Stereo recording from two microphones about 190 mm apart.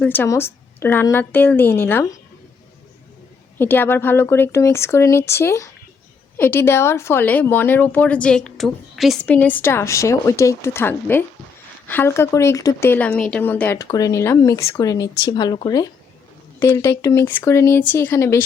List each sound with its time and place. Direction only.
0.0 s speech: 10° left (ahead or behind)
3.6 s speech: 10° left (ahead or behind)